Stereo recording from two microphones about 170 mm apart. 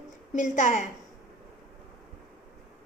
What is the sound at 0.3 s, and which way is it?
Speech, 45° left (ahead or behind).